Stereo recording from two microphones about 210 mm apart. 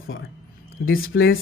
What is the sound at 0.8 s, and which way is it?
Speech, 50° left (ahead or behind).